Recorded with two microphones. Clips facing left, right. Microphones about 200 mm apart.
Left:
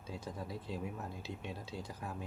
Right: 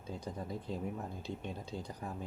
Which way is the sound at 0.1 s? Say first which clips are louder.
Right 2 dB; 5° left (ahead or behind).